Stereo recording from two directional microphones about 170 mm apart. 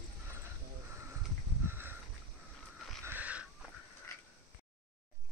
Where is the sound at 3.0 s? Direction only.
10° right (ahead or behind).